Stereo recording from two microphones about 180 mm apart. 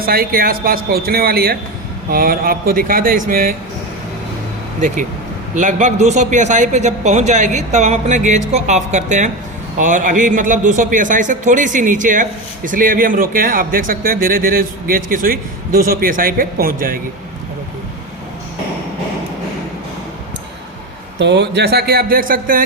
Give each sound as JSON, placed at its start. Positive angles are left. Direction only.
{"t": 0.0, "sound": "a man's voice", "side_deg": -55}
{"t": 5.5, "sound": "a man's voice", "side_deg": -45}
{"t": 21.2, "sound": "speech", "side_deg": -70}